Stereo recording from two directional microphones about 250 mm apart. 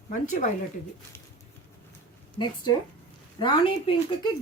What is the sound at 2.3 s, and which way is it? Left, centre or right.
A woman's voice, centre.